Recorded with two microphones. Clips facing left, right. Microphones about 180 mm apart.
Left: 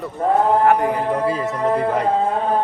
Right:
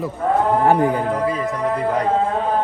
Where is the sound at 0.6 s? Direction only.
30° right (ahead or behind).